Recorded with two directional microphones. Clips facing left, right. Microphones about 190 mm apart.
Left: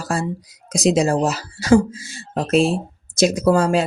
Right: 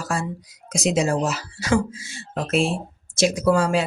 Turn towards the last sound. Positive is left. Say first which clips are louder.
# left 3 dB
turn(degrees=40)  # may be behind; listen again after turning